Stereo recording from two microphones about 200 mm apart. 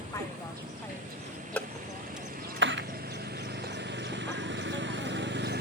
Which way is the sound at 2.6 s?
65° right (ahead or behind).